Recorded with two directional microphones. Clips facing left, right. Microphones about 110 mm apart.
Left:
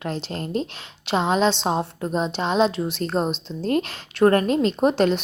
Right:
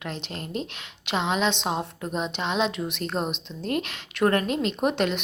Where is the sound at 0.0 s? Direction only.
35° left (ahead or behind).